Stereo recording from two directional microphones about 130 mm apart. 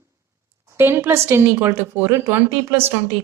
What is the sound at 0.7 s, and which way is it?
Speech, 20° right (ahead or behind).